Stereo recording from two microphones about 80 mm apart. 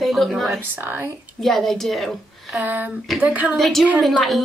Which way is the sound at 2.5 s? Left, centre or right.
Centre.